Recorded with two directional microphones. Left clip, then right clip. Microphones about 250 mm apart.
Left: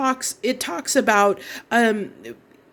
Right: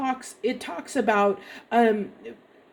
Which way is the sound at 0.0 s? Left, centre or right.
Left.